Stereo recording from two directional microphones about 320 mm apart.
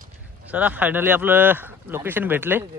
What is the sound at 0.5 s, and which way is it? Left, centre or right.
Speech, centre.